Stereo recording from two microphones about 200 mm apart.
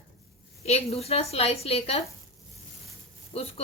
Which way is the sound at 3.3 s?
30° left (ahead or behind).